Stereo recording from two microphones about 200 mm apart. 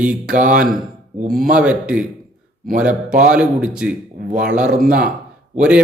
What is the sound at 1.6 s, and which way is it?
Speech, 5° right (ahead or behind).